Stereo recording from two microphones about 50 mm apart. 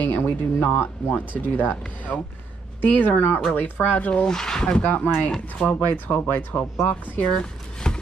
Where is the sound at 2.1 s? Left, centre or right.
Left.